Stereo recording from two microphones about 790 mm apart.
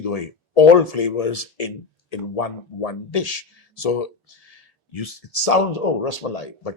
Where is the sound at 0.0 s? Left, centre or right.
Left.